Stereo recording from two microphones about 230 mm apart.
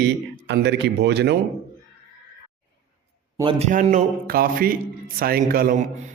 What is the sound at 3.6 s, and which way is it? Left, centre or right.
A man's voice, right.